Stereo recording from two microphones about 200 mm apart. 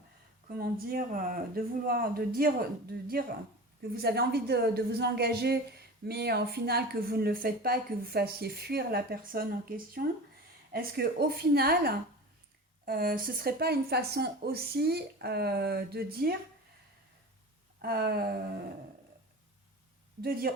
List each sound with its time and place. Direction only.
0.5 s speech: 50° right (ahead or behind)
17.7 s speech: 50° right (ahead or behind)
20.2 s speech: 45° right (ahead or behind)